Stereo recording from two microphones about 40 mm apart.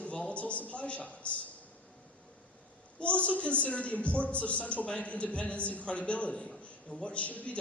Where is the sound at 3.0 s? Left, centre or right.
Left.